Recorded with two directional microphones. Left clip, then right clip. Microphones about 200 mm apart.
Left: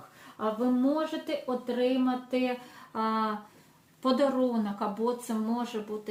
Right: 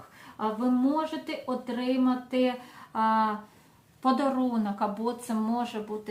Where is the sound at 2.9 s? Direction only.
25° right (ahead or behind).